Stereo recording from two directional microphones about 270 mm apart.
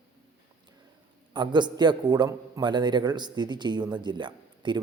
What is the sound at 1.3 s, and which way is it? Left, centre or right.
A man's voice, centre.